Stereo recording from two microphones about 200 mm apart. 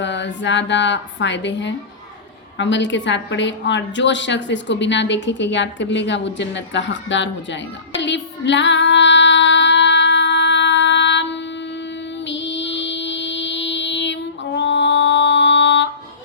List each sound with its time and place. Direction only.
0.0 s a woman's voice: 65° left (ahead or behind)
8.0 s female singing: 65° left (ahead or behind)
12.3 s child singing: 65° left (ahead or behind)